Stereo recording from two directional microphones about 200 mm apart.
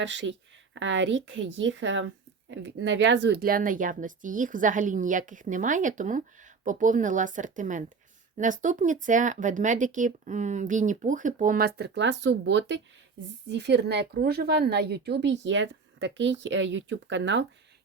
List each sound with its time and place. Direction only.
0.0 s a woman's voice: 65° right (ahead or behind)